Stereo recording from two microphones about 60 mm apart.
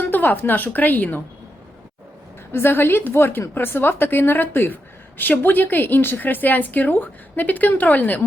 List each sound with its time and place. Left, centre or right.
0.0 s a woman's voice: left
2.5 s a woman's voice: left